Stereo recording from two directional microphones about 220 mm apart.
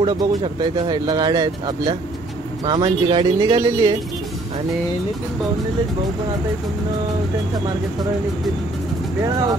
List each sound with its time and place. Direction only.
0.0 s speech: 20° right (ahead or behind)